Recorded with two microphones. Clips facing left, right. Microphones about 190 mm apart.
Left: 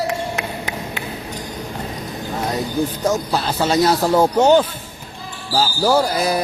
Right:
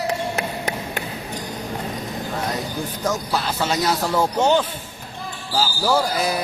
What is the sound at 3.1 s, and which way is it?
Speech, 35° left (ahead or behind).